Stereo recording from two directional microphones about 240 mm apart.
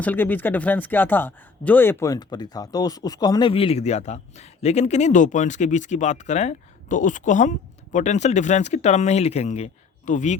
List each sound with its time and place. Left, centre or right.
0.0 s speech: centre; by 10.3 s left